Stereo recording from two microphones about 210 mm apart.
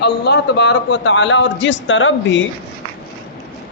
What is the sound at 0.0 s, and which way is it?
Speech, 55° left (ahead or behind).